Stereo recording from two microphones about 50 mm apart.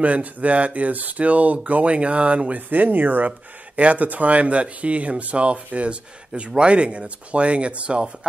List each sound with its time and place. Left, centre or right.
0.0 s speech: right